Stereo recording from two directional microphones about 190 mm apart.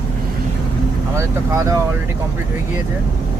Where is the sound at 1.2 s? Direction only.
15° right (ahead or behind).